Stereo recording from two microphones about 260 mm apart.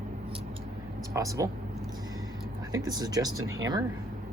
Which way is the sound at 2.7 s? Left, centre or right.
Centre.